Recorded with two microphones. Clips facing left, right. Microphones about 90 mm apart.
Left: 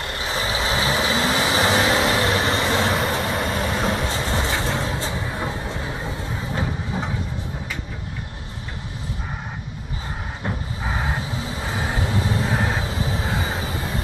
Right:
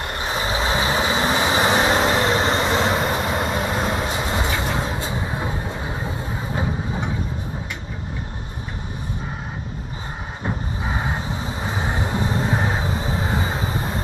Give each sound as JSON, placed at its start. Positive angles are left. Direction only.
{"t": 0.0, "sound": "vehicle", "side_deg": -30}
{"t": 3.1, "sound": "vehicle", "side_deg": 0}
{"t": 3.3, "sound": "vehicle", "side_deg": -35}
{"t": 4.1, "sound": "music", "side_deg": -10}
{"t": 4.6, "sound": "vehicle", "side_deg": -15}
{"t": 10.4, "sound": "vehicle", "side_deg": -15}